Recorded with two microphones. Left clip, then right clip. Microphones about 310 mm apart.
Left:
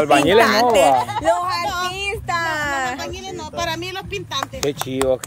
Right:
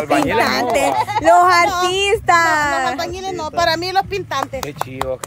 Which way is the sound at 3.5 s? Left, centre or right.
Centre.